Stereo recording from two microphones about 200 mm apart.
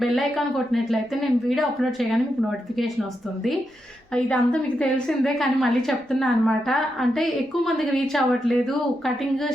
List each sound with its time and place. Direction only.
0.0 s a woman's voice: centre (ahead or behind)
4.1 s a woman's voice: 5° left (ahead or behind)